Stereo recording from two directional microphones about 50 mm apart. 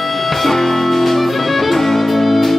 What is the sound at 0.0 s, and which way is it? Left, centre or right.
Music, centre.